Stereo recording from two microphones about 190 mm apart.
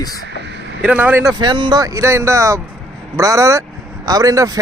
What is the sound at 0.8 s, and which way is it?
Speech, 5° right (ahead or behind).